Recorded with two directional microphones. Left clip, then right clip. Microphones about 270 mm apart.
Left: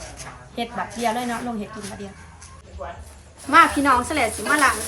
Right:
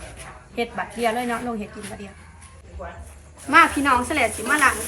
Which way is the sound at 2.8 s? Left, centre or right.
Left.